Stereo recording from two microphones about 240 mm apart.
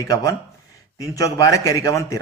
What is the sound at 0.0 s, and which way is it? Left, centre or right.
A man's voice, centre.